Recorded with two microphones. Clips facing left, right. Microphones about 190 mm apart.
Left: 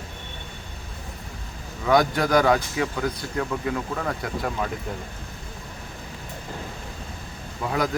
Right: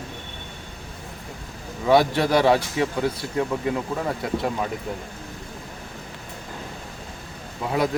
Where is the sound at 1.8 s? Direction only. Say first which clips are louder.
Right 2 dB; 25° right (ahead or behind).